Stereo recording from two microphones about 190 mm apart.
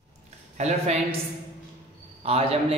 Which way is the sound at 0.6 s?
35° right (ahead or behind).